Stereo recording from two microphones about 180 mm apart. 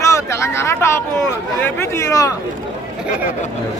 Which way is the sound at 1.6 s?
15° left (ahead or behind).